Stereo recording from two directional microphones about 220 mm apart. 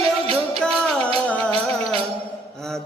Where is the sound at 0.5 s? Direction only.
Centre (ahead or behind).